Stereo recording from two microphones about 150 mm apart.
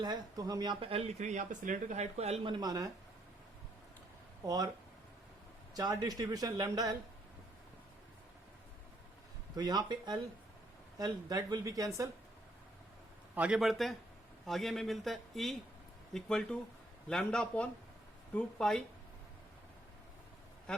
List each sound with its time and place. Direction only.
0.0 s speech: 25° right (ahead or behind)
4.4 s a man's voice: 25° right (ahead or behind)
5.7 s a man's voice: 25° right (ahead or behind)
9.6 s a man's voice: 25° right (ahead or behind)
13.3 s a man's voice: 10° right (ahead or behind)
20.7 s a man's voice: 5° left (ahead or behind)